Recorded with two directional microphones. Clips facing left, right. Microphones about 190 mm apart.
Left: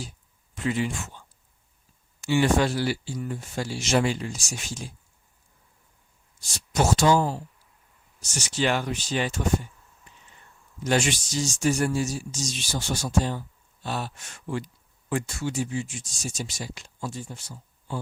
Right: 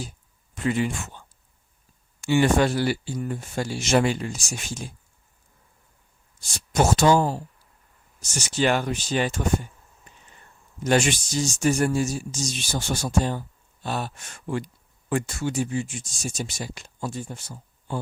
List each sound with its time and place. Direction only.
0.5 s speech: 50° right (ahead or behind)
2.2 s speech: 55° right (ahead or behind)
6.7 s speech: 55° right (ahead or behind)
10.8 s speech: 55° right (ahead or behind)